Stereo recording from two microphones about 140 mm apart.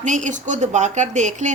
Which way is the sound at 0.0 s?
60° right (ahead or behind).